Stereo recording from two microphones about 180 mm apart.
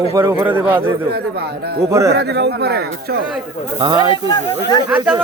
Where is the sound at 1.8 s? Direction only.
15° right (ahead or behind).